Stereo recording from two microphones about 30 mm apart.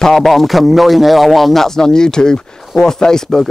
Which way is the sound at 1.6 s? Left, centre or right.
Centre.